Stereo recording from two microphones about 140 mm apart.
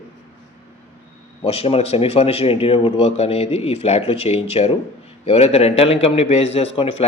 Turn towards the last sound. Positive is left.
turn(degrees=45)  # may be behind; listen again after turning